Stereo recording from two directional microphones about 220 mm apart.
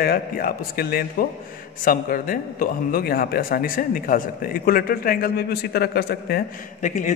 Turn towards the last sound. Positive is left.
turn(degrees=35)  # may be behind; listen again after turning